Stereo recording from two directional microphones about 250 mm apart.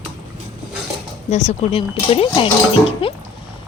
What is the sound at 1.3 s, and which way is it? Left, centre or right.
Speech, left.